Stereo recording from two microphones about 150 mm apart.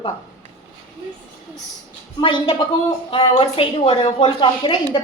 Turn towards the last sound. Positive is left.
turn(degrees=35)  # may be behind; listen again after turning